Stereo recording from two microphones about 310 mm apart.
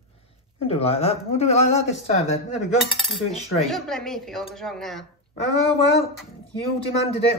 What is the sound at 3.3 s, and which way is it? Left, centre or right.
Speech, centre.